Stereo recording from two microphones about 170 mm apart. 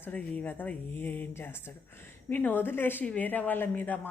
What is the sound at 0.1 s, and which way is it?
Speech, 10° left (ahead or behind).